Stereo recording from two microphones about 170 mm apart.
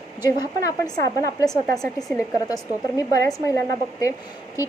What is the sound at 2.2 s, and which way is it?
Speech, 20° left (ahead or behind).